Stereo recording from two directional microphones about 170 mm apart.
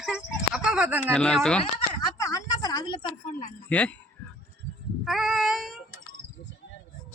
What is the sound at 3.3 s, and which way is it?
Speech, 50° left (ahead or behind).